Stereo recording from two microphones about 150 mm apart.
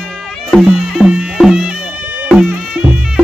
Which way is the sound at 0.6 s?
Centre (ahead or behind).